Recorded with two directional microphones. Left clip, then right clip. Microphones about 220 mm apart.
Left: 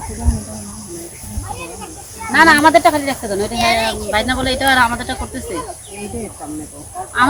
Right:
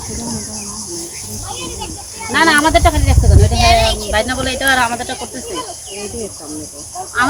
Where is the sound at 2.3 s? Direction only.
50° left (ahead or behind).